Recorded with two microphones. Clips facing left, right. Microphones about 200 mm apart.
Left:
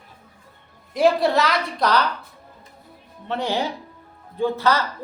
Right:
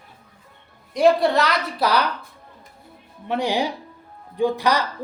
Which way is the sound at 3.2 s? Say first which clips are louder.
Right 2 dB; 15° right (ahead or behind).